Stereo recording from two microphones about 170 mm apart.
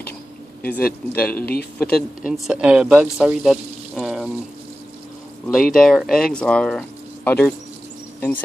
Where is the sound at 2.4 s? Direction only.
5° right (ahead or behind).